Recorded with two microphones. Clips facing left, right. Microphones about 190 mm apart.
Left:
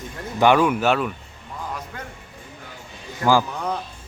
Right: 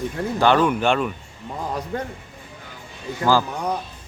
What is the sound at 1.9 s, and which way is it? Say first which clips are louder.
Speech: right 9 dB; 30° right (ahead or behind).